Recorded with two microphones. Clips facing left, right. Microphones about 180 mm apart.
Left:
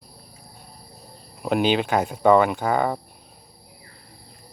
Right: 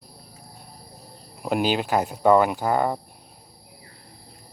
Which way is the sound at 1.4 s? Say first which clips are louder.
Left 2 dB; 5° right (ahead or behind).